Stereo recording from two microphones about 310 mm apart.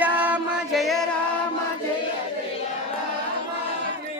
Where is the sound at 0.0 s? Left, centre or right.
Centre.